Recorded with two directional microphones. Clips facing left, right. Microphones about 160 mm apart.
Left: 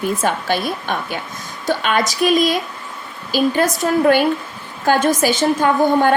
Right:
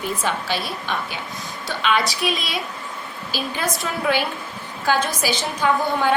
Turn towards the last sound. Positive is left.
turn(degrees=50)  # may be behind; listen again after turning